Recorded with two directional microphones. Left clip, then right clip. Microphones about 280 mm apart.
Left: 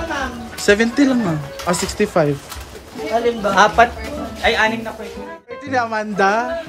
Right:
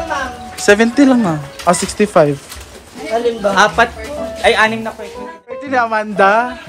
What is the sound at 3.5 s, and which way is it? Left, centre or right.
Speech, right.